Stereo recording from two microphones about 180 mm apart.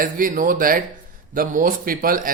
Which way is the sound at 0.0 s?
50° right (ahead or behind).